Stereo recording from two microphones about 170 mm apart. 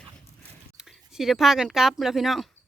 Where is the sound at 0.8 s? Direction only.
5° right (ahead or behind).